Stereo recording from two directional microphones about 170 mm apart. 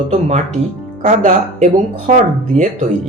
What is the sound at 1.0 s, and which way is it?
Speech, 45° right (ahead or behind).